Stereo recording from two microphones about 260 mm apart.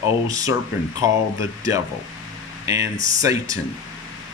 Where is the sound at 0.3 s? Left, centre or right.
Centre.